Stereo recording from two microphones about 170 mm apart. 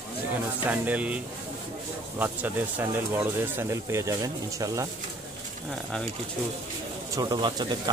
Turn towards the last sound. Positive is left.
turn(degrees=-25)  # may be behind; listen again after turning